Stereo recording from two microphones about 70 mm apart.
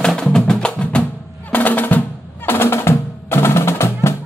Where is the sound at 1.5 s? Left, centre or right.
Left.